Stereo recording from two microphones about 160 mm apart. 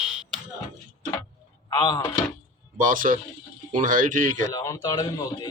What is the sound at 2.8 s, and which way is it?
A man's voice, 55° right (ahead or behind).